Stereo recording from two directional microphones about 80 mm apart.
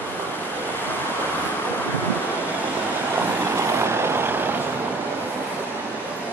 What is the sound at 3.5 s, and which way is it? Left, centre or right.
Vehicle, right.